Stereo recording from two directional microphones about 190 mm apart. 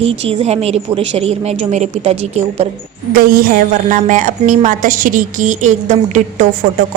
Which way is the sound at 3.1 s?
50° right (ahead or behind).